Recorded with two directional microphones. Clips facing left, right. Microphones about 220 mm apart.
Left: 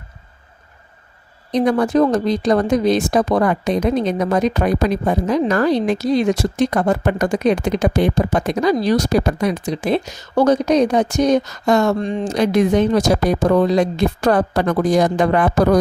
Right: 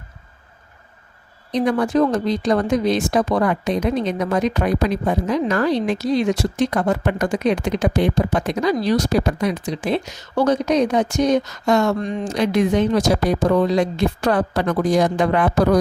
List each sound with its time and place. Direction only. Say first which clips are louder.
1.5 s speech: left 2 dB; 40° left (ahead or behind)